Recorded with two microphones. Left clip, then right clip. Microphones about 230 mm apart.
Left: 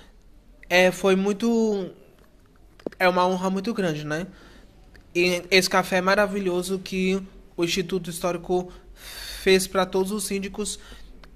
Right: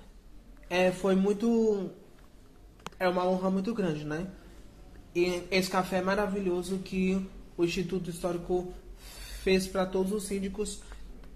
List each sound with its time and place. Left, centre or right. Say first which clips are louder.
0.7 s speech: left 8 dB; left
2.9 s speech: left 7 dB; left